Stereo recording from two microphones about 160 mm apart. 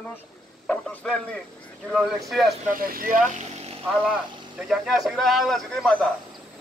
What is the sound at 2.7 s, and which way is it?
Speech, 65° right (ahead or behind).